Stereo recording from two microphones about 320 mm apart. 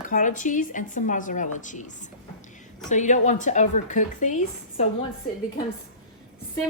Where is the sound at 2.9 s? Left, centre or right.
Left.